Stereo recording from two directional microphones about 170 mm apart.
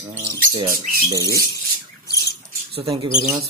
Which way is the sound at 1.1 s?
20° right (ahead or behind).